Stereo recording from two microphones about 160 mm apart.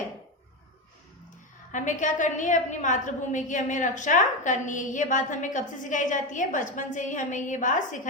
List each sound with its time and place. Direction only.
1.7 s a woman's voice: 50° left (ahead or behind)